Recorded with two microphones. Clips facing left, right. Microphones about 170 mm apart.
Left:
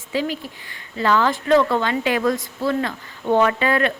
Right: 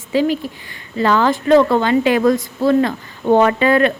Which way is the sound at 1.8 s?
25° right (ahead or behind).